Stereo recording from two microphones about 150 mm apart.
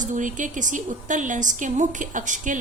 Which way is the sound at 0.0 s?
55° right (ahead or behind).